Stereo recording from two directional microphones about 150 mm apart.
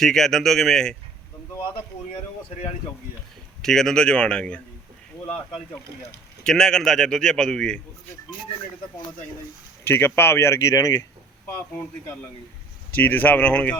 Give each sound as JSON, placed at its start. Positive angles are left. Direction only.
{"t": 0.0, "sound": "a man's voice", "side_deg": 5}
{"t": 3.6, "sound": "a man's voice", "side_deg": 5}
{"t": 9.8, "sound": "speech", "side_deg": 15}
{"t": 11.4, "sound": "speech", "side_deg": 10}